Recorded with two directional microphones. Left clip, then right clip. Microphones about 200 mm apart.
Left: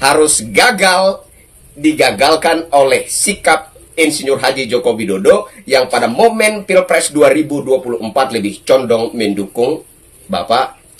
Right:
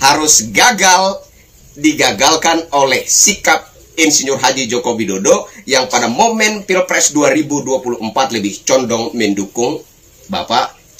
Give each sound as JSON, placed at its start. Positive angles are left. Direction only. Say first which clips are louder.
{"t": 0.0, "sound": "a man's voice", "louder": "even", "side_deg": 10}